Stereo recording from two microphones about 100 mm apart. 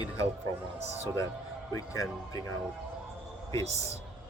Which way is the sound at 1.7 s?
35° left (ahead or behind).